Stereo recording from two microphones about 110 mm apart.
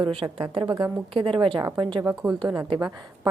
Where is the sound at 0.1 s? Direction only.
50° right (ahead or behind).